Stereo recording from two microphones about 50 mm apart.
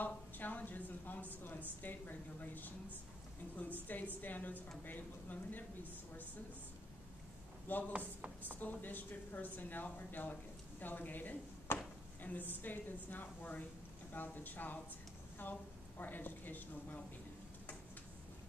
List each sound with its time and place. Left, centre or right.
0.0 s a sound: left
1.8 s speech: left
3.8 s speech: left
7.7 s speech: left
11.7 s a sound: left
12.2 s speech: left